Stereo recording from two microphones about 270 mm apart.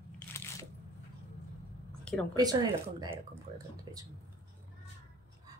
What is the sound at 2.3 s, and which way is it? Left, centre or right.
Speech, centre.